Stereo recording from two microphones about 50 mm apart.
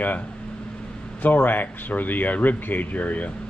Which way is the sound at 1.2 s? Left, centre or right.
Left.